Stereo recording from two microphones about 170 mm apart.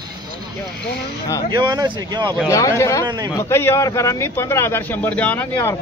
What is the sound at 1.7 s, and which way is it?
Speech, 20° right (ahead or behind).